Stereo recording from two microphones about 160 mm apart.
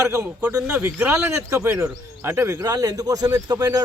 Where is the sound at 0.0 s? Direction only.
20° right (ahead or behind).